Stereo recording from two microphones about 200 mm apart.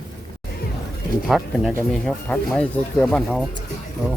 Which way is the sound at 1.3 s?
Centre (ahead or behind).